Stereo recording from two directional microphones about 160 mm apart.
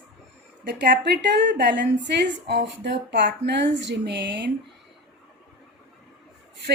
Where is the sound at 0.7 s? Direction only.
90° right.